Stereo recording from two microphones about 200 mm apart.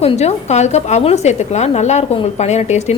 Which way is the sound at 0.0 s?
30° left (ahead or behind).